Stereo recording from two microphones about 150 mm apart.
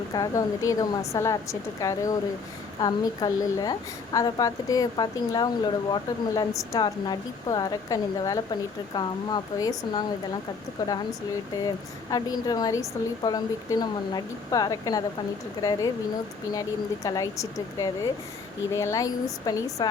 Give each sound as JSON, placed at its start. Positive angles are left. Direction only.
{"t": 0.1, "sound": "a woman's voice", "side_deg": 20}
{"t": 12.1, "sound": "a woman's voice", "side_deg": 25}